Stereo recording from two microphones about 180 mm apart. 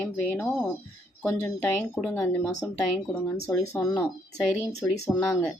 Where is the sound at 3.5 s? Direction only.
Centre (ahead or behind).